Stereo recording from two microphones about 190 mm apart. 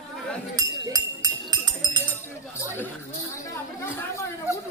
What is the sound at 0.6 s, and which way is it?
Chink, 20° right (ahead or behind).